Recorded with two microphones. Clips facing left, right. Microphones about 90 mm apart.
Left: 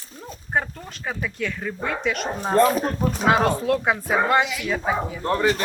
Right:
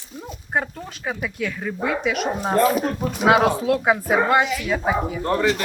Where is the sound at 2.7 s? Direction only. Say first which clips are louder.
Even; 35° left (ahead or behind).